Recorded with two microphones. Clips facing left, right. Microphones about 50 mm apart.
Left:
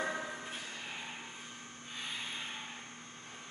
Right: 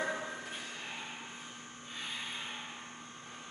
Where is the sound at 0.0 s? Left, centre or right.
Centre.